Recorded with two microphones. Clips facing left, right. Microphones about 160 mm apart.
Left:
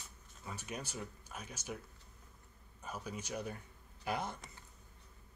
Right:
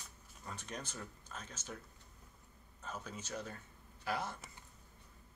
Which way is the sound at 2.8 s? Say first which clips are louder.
Left 2 dB; 10° left (ahead or behind).